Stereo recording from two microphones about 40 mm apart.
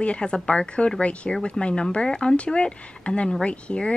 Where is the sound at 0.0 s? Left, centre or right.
Left.